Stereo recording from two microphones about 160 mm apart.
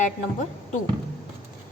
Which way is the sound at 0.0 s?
50° left (ahead or behind).